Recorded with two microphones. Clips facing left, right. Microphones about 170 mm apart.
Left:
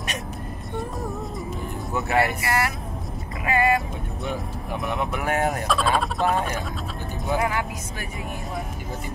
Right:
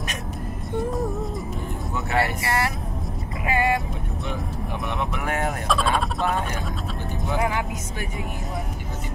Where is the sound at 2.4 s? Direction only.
30° right (ahead or behind).